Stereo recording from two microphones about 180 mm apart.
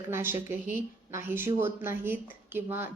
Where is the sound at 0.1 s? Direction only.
15° right (ahead or behind).